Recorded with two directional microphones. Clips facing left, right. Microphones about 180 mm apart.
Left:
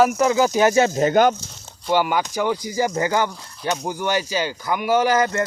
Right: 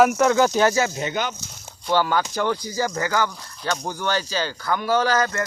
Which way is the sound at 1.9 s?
15° left (ahead or behind).